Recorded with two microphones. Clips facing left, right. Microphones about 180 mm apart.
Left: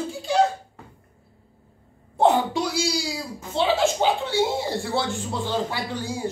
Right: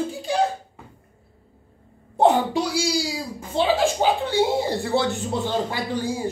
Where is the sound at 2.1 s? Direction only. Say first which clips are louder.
Right 1 dB; 15° right (ahead or behind).